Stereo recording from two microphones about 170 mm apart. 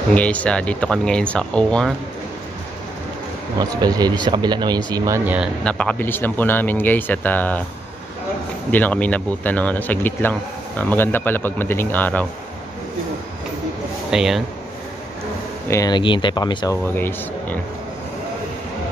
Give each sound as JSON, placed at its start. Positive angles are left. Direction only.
{"t": 0.1, "sound": "speech", "side_deg": 10}
{"t": 3.5, "sound": "speech", "side_deg": -20}
{"t": 5.6, "sound": "speech", "side_deg": 5}
{"t": 8.7, "sound": "speech", "side_deg": 10}
{"t": 14.1, "sound": "speech", "side_deg": 0}
{"t": 15.7, "sound": "speech", "side_deg": 25}
{"t": 16.8, "sound": "speech", "side_deg": 10}